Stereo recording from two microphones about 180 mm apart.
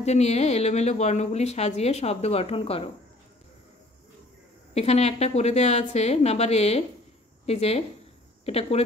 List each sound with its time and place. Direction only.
0.0 s a woman's voice: 40° left (ahead or behind)
4.7 s a woman's voice: 35° left (ahead or behind)